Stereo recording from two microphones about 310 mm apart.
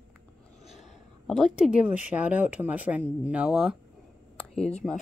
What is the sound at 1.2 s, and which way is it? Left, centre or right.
Speech, centre.